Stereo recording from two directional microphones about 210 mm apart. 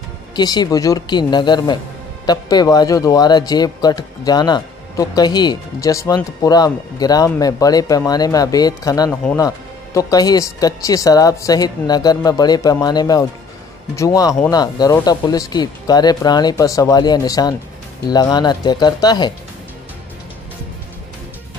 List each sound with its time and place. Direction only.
0.4 s speech: 20° left (ahead or behind)